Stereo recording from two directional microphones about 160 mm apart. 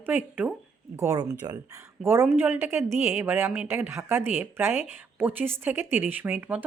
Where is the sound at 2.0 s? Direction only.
15° right (ahead or behind).